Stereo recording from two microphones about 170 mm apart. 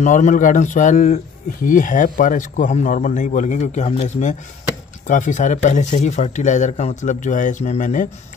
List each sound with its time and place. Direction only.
0.0 s speech: 45° left (ahead or behind)